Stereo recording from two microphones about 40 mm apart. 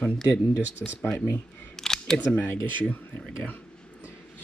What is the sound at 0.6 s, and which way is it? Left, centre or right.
Speech, right.